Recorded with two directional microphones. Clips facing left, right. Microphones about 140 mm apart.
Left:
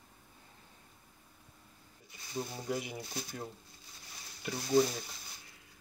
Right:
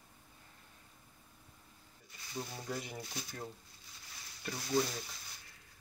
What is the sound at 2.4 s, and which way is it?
Speech, 15° left (ahead or behind).